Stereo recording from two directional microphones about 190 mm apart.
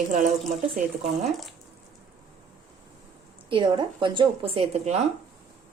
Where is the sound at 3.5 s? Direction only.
25° right (ahead or behind).